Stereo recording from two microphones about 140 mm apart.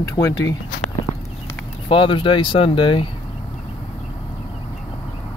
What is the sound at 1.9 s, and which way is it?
Speech, 35° left (ahead or behind).